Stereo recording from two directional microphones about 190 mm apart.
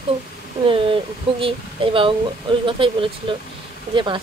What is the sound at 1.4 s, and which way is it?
Speech, 25° right (ahead or behind).